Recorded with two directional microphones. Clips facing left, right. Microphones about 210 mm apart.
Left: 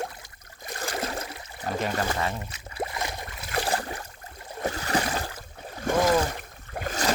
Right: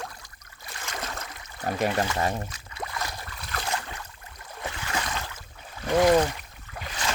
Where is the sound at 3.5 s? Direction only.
30° left (ahead or behind).